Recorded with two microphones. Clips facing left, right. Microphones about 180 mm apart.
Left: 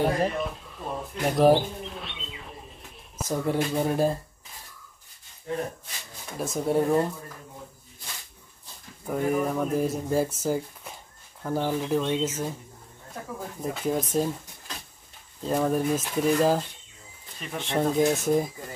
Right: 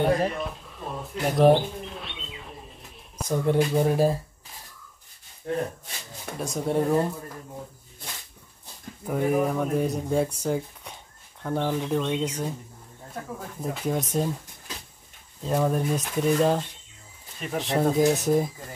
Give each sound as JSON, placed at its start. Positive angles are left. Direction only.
{"t": 0.0, "sound": "music", "side_deg": 0}
{"t": 3.2, "sound": "speech", "side_deg": 0}
{"t": 5.5, "sound": "speech", "side_deg": -60}
{"t": 6.3, "sound": "speech", "side_deg": 0}
{"t": 9.0, "sound": "speech", "side_deg": 0}
{"t": 13.6, "sound": "speech", "side_deg": 0}
{"t": 15.4, "sound": "speech", "side_deg": 0}